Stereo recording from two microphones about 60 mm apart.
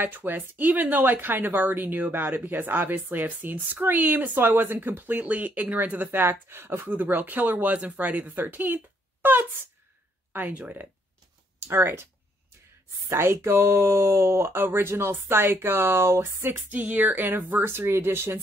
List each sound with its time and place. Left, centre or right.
0.0 s speech: right
6.9 s speech: right
11.6 s speech: right
13.1 s speech: right
16.7 s speech: right